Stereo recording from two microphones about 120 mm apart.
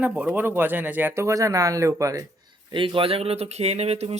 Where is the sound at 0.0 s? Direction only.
10° right (ahead or behind); by 2.2 s 25° right (ahead or behind).